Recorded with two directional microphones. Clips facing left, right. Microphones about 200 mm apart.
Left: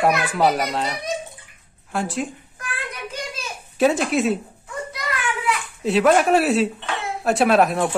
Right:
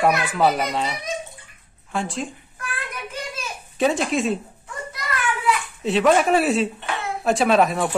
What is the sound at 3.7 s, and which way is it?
Speech, 5° left (ahead or behind).